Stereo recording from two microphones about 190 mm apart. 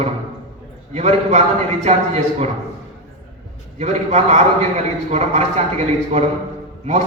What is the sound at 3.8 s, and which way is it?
A man's voice, 35° right (ahead or behind).